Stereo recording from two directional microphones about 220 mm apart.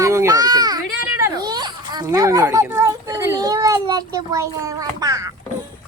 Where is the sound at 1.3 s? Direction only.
20° right (ahead or behind).